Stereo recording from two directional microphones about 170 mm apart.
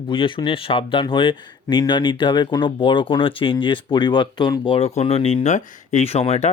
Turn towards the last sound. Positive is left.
turn(degrees=40)  # may be behind; listen again after turning